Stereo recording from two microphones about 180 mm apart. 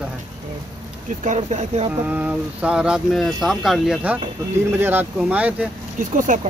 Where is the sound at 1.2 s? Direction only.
40° right (ahead or behind).